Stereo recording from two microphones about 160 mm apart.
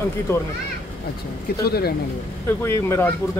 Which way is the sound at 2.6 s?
15° left (ahead or behind).